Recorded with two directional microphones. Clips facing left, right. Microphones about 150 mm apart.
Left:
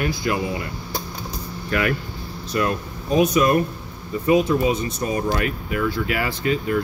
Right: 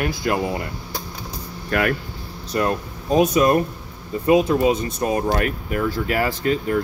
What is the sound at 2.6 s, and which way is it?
Speech, 40° right (ahead or behind).